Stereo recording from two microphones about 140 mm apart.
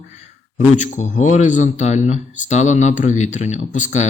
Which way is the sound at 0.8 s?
60° left (ahead or behind).